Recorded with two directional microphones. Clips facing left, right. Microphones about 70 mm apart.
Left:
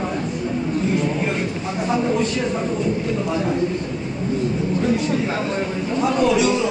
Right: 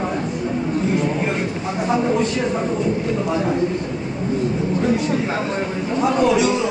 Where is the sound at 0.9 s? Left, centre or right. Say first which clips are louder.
Right 1 dB; right.